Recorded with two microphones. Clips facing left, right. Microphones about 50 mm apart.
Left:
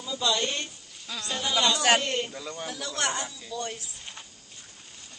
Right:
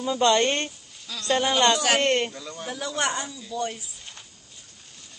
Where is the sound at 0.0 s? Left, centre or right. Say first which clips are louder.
Right 7 dB; right.